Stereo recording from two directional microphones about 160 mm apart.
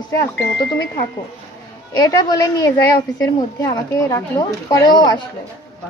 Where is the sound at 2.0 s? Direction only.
25° left (ahead or behind).